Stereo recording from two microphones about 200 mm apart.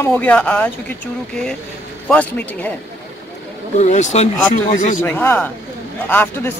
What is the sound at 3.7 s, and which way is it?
Speech, 35° left (ahead or behind).